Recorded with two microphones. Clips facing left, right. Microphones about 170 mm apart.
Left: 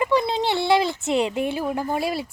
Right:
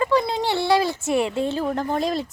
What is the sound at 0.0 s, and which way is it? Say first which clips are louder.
A woman's voice: even; 20° left (ahead or behind).